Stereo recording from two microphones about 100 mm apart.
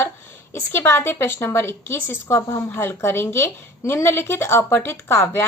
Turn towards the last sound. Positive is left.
turn(degrees=25)  # may be behind; listen again after turning